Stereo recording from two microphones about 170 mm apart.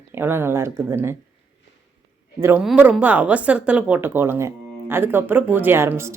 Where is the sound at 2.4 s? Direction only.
10° right (ahead or behind).